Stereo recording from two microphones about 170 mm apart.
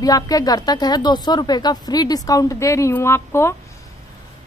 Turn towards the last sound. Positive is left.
turn(degrees=15)  # may be behind; listen again after turning